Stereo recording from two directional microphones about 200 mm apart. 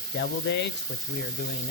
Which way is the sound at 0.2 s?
60° left (ahead or behind).